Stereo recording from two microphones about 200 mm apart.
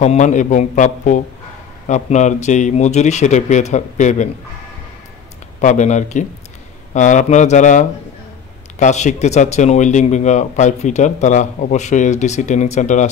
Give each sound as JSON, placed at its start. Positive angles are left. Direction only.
{"t": 0.0, "sound": "speech", "side_deg": 35}
{"t": 5.6, "sound": "speech", "side_deg": 35}